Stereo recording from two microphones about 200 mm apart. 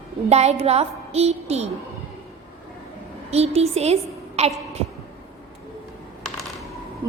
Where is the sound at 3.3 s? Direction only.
30° right (ahead or behind).